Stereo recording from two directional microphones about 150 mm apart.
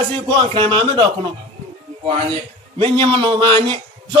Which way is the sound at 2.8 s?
30° right (ahead or behind).